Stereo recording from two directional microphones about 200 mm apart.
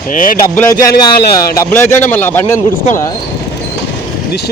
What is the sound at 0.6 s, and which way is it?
A man's voice, 15° left (ahead or behind).